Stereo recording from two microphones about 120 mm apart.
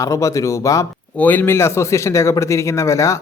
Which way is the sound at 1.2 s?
15° left (ahead or behind).